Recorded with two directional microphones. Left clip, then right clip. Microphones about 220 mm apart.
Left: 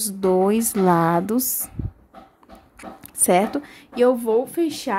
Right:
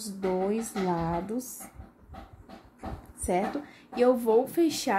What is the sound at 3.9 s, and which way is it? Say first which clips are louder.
Speech: left 5 dB; 20° left (ahead or behind).